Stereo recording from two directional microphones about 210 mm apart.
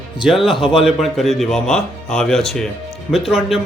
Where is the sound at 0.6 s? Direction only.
Centre (ahead or behind).